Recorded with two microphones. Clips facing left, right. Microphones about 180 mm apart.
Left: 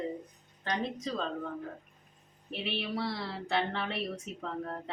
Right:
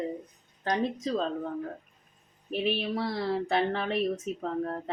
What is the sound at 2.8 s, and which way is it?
A woman's voice, 45° right (ahead or behind).